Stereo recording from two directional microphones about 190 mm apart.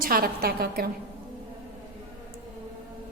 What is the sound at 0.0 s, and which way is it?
Speech, 50° right (ahead or behind).